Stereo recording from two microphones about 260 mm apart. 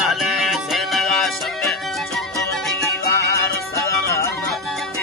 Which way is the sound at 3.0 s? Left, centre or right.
Centre.